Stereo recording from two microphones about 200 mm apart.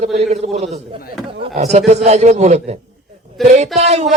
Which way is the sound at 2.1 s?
35° right (ahead or behind).